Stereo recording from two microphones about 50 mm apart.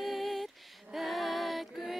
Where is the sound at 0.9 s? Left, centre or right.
Centre.